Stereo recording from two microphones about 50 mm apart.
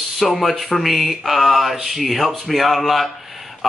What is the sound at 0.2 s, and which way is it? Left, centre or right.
Speech, centre.